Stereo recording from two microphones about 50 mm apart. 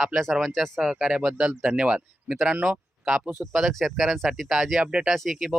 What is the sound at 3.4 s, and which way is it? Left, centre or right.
Speech, right.